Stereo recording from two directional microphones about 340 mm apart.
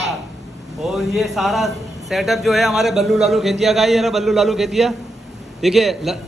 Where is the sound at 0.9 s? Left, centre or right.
Centre.